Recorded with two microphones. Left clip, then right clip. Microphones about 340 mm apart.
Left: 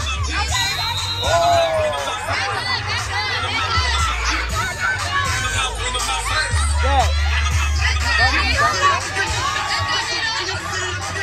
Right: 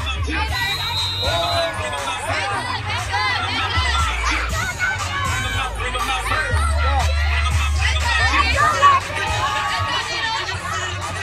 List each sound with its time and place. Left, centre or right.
3.3 s music: centre
7.8 s music: centre